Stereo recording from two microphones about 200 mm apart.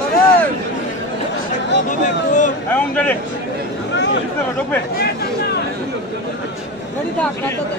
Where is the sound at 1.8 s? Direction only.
40° left (ahead or behind).